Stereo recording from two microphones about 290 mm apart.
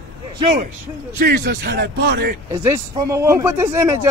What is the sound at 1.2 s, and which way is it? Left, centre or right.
Speech, right.